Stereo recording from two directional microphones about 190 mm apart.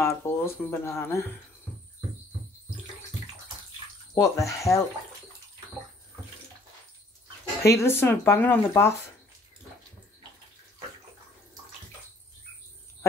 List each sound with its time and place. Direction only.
0.0 s speech: 15° left (ahead or behind)
4.1 s speech: 15° left (ahead or behind)
7.6 s speech: 15° left (ahead or behind)